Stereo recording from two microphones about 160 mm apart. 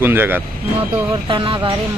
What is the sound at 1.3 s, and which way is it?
Speech, 35° right (ahead or behind).